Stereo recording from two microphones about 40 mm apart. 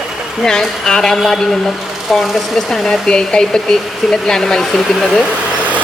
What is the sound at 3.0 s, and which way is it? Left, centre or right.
Speech, left.